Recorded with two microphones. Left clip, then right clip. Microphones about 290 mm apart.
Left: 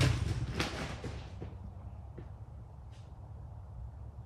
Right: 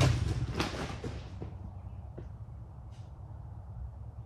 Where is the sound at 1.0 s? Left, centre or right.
Centre.